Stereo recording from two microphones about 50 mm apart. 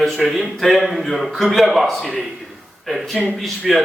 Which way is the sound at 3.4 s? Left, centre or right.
Centre.